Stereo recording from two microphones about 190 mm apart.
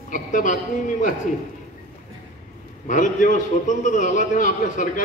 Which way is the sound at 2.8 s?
40° left (ahead or behind).